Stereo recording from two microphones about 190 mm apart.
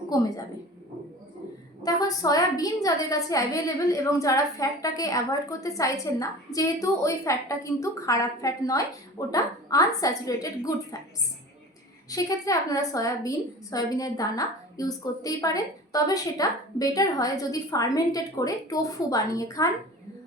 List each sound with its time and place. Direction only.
0.1 s a woman's voice: 20° left (ahead or behind)
1.8 s a woman's voice: 20° left (ahead or behind)
12.0 s a woman's voice: 20° left (ahead or behind)